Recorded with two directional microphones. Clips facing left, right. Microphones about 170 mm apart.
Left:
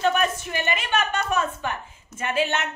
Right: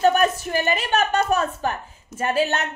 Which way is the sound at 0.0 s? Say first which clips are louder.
Right 4 dB; 40° right (ahead or behind).